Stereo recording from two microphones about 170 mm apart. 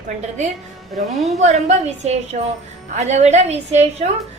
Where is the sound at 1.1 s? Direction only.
Centre (ahead or behind).